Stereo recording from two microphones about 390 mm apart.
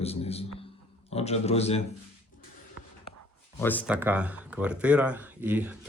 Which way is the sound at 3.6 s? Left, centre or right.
Centre.